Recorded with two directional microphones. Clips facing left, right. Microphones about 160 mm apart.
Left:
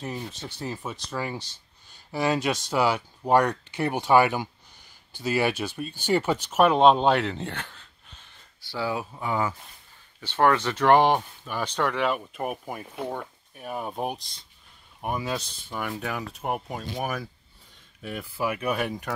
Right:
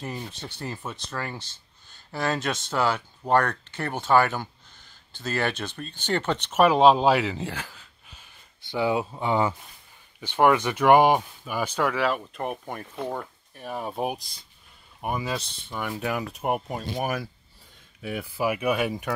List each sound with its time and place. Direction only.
0.0 s speech: centre (ahead or behind)
8.5 s speech: 20° right (ahead or behind)
10.2 s speech: 15° right (ahead or behind)